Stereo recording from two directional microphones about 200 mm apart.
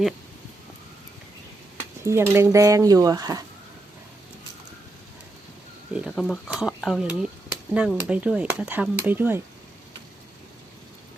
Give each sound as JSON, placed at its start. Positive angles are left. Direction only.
{"t": 2.0, "sound": "speech", "side_deg": -15}
{"t": 5.9, "sound": "speech", "side_deg": -5}